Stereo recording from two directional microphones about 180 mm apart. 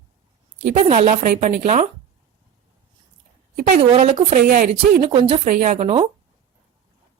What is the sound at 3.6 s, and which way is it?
Speech, 35° right (ahead or behind).